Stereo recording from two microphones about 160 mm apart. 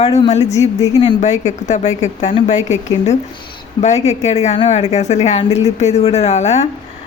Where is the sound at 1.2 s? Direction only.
45° left (ahead or behind).